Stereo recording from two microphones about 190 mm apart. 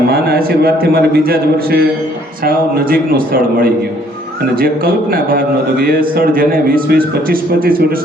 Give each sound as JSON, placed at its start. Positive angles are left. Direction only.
{"t": 0.1, "sound": "a man's voice", "side_deg": -55}